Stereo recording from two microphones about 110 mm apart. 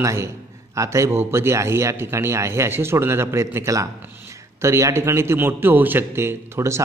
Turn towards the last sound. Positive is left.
turn(degrees=-25)  # may be behind; listen again after turning